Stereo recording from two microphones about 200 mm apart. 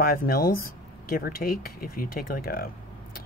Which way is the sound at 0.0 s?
45° left (ahead or behind).